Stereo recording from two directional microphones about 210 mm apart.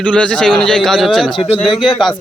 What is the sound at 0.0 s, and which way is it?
Speech, 5° left (ahead or behind).